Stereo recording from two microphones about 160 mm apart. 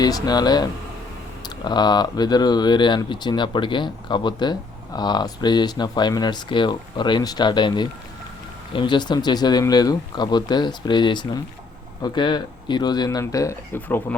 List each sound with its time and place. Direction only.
0.0 s speech: 25° left (ahead or behind)